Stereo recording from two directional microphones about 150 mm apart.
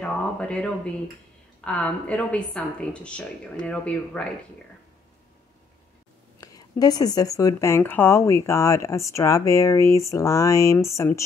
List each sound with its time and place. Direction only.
0.0 s a sound: 5° left (ahead or behind)
1.6 s a woman's voice: 10° left (ahead or behind)
6.4 s speech: 25° left (ahead or behind)